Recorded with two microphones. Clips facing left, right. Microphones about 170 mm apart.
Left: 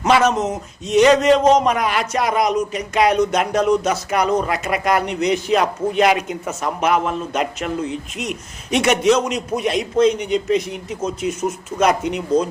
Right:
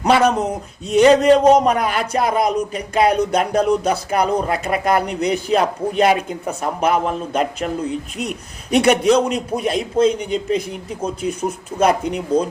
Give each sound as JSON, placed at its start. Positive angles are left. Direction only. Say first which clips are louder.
{"t": 0.0, "sound": "speech", "louder": "right 1 dB", "side_deg": -35}